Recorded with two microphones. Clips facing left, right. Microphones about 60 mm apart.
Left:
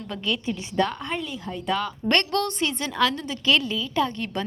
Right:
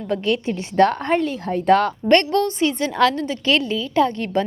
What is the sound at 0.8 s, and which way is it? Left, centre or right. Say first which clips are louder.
A woman's voice: right 10 dB; right.